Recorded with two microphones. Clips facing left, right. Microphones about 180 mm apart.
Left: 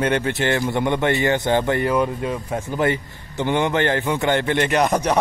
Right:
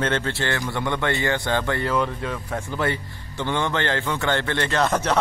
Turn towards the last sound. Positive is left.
turn(degrees=15)  # may be behind; listen again after turning